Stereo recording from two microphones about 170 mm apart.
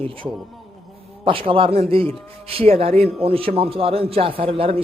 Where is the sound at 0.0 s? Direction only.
30° right (ahead or behind).